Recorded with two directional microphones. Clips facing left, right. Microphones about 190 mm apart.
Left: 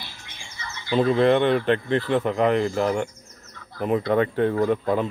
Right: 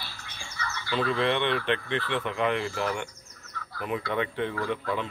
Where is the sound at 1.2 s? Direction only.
45° left (ahead or behind).